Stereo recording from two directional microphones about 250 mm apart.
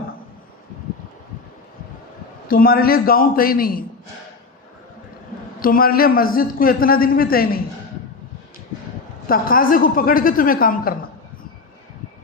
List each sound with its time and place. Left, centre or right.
2.5 s a man's voice: left
5.5 s a man's voice: left
9.2 s a man's voice: left